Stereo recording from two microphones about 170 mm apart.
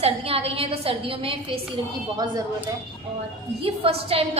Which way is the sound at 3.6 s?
35° right (ahead or behind).